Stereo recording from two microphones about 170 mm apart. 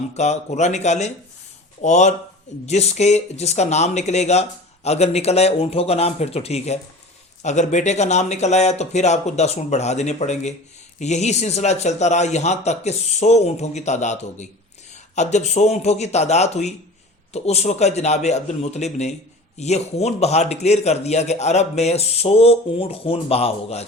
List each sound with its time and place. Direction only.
0.1 s a man's voice: 40° left (ahead or behind)